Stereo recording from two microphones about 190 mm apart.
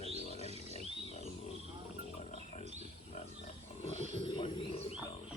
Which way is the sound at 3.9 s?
35° left (ahead or behind).